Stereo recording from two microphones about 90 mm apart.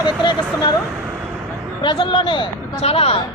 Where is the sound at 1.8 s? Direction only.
70° left (ahead or behind); by 3.2 s 90° left.